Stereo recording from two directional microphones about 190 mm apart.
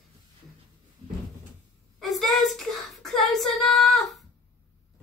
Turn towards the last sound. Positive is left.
turn(degrees=0)  # may be behind; listen again after turning